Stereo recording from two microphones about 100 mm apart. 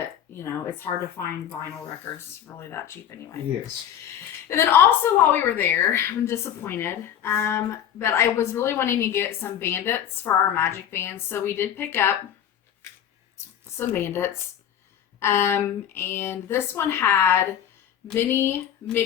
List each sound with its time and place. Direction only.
0.3 s a woman's voice: 20° left (ahead or behind)
4.4 s a woman's voice: 25° left (ahead or behind)
13.7 s a woman's voice: 25° left (ahead or behind)